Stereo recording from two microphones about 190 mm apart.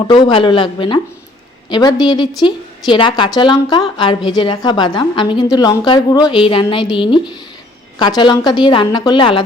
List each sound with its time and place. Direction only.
0.0 s a woman's voice: 25° left (ahead or behind)